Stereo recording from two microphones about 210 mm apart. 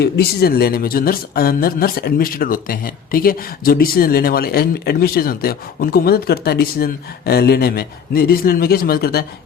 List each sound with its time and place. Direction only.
0.0 s speech: 50° left (ahead or behind)